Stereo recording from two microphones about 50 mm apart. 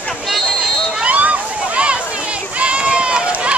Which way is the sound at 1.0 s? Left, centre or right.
Right.